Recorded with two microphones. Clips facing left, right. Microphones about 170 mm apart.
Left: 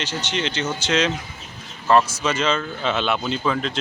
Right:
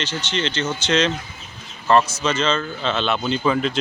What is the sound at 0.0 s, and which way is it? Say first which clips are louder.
Speech: right 1 dB; 15° left (ahead or behind).